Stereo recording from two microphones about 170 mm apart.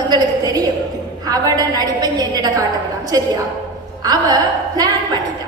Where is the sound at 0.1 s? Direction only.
20° right (ahead or behind).